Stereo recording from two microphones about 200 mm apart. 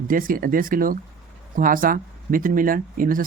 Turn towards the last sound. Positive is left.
turn(degrees=-45)  # may be behind; listen again after turning